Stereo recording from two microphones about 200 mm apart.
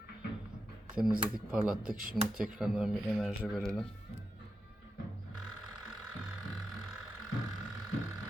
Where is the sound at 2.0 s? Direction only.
45° right (ahead or behind).